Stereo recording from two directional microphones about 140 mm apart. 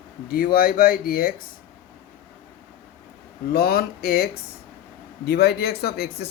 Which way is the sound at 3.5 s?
90° left.